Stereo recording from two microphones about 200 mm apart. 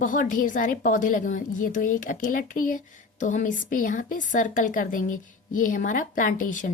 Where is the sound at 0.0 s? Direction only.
40° left (ahead or behind).